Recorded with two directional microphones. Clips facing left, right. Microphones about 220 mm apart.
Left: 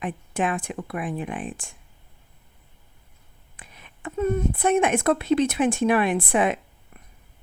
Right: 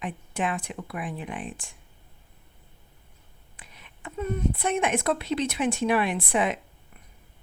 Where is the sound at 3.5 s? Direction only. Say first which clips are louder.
Left 3 dB; 50° left (ahead or behind).